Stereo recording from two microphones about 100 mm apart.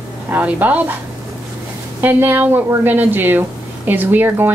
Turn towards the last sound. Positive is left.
turn(degrees=-20)  # may be behind; listen again after turning